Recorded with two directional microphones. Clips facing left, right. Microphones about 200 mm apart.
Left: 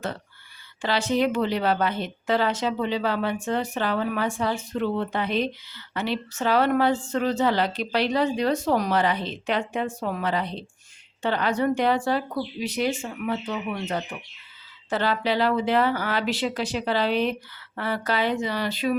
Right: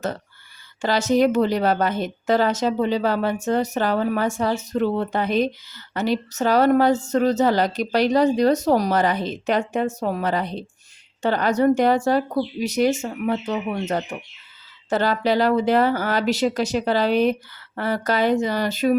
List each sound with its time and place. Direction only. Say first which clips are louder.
0.8 s speech: right 5 dB; 45° right (ahead or behind)